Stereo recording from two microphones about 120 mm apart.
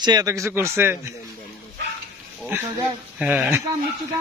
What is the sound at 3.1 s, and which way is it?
Speech, 10° right (ahead or behind).